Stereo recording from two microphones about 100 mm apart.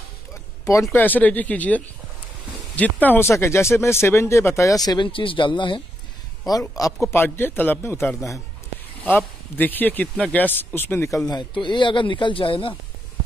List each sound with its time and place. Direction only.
0.3 s a sound: 30° left (ahead or behind)
0.9 s speech: 20° left (ahead or behind)
4.8 s speech: 50° left (ahead or behind)
6.7 s speech: 35° left (ahead or behind)
7.1 s speech: 20° left (ahead or behind)
11.5 s speech: 55° left (ahead or behind)